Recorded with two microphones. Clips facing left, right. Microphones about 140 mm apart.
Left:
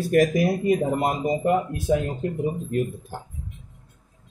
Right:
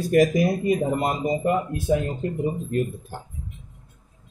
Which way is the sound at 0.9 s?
15° left (ahead or behind).